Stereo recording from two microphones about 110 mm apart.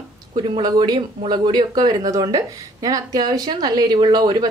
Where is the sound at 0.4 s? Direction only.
40° right (ahead or behind).